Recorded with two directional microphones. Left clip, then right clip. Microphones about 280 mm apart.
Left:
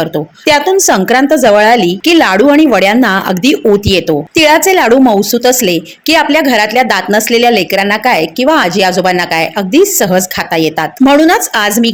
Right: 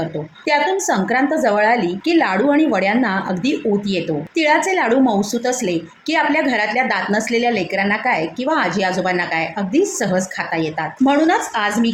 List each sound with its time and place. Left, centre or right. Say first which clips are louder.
0.0 s a woman's voice: left 11 dB; left